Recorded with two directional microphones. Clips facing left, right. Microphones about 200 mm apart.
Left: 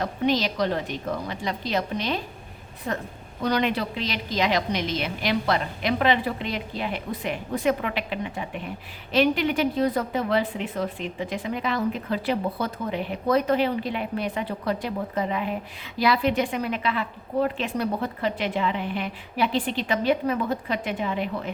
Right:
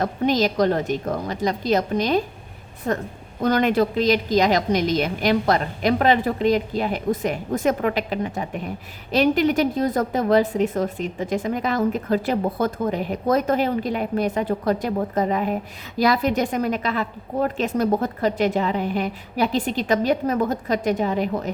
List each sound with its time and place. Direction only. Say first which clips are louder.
0.0 s a woman's voice: right 4 dB; 45° right (ahead or behind)